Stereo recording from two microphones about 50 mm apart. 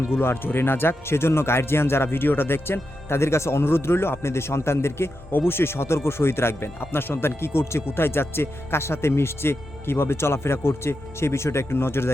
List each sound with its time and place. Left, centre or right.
0.2 s speech: left